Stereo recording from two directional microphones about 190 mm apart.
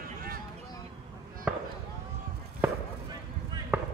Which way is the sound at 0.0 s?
50° right (ahead or behind).